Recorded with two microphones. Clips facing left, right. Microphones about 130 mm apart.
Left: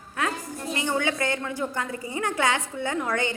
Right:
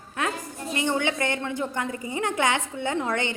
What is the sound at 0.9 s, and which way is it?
A woman's voice, 25° right (ahead or behind).